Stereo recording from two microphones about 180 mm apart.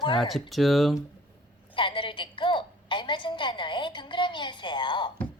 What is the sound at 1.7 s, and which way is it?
A woman's voice, 30° left (ahead or behind).